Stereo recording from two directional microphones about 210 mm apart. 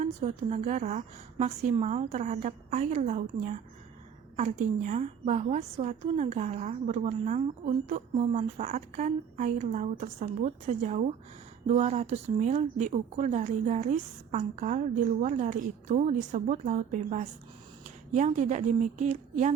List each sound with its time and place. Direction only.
0.0 s a woman's voice: 35° right (ahead or behind)